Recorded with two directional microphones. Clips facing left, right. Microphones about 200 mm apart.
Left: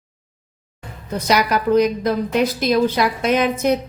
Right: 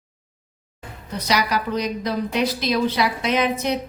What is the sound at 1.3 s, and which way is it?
A woman's voice, 50° left (ahead or behind).